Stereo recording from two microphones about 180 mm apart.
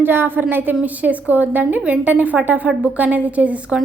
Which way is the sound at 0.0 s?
10° right (ahead or behind).